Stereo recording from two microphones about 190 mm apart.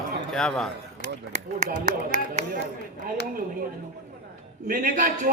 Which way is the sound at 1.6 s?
40° right (ahead or behind).